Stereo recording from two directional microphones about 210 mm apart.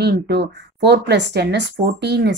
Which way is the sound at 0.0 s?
50° right (ahead or behind).